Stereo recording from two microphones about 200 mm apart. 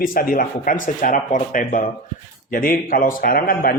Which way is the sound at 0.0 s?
45° left (ahead or behind).